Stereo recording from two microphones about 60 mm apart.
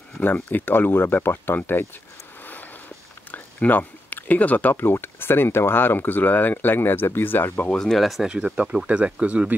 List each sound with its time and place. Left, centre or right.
0.2 s speech: left
3.3 s a sound: left
4.9 s speech: left
7.6 s speech: centre
8.3 s speech: centre